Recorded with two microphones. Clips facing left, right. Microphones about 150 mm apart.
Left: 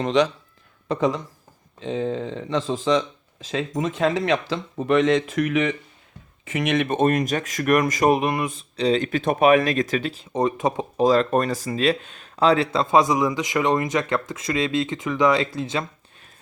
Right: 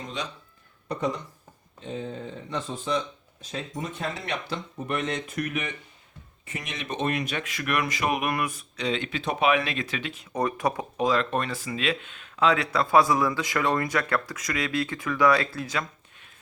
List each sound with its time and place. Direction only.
0.0 s speech: 90° left; by 8.2 s 40° left (ahead or behind)
8.2 s speech: 25° left (ahead or behind)
11.0 s speech: 35° left (ahead or behind)